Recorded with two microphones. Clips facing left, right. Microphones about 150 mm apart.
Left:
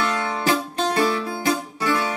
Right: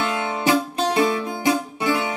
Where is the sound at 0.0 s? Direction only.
20° right (ahead or behind).